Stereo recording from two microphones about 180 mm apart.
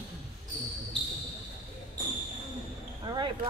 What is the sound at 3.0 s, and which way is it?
Basketball bounce, 25° right (ahead or behind).